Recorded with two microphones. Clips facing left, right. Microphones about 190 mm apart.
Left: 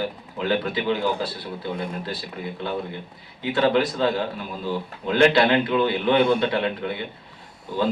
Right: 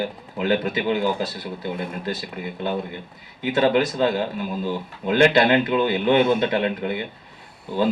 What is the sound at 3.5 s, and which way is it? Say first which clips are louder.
Speech: right 1 dB; 45° right (ahead or behind).